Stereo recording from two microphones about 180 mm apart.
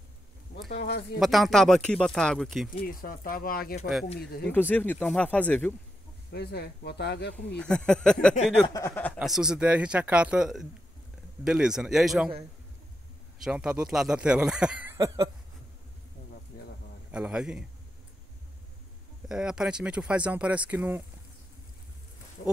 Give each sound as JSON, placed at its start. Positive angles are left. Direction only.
{"t": 0.7, "sound": "a sound", "side_deg": 65}
{"t": 1.2, "sound": "speech", "side_deg": 0}
{"t": 2.8, "sound": "speech", "side_deg": 50}
{"t": 4.5, "sound": "speech", "side_deg": 10}
{"t": 6.3, "sound": "speech", "side_deg": 65}
{"t": 7.3, "sound": "speech", "side_deg": 5}
{"t": 8.6, "sound": "speech", "side_deg": 15}
{"t": 9.2, "sound": "speech", "side_deg": -5}
{"t": 13.4, "sound": "speech", "side_deg": -5}
{"t": 17.1, "sound": "speech", "side_deg": -5}
{"t": 19.2, "sound": "speech", "side_deg": -5}